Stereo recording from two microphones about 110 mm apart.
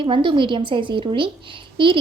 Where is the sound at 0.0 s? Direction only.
50° right (ahead or behind).